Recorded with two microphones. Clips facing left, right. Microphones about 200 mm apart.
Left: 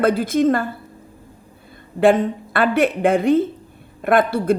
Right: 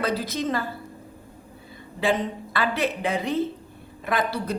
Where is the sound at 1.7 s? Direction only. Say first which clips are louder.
Left 9 dB; 55° left (ahead or behind).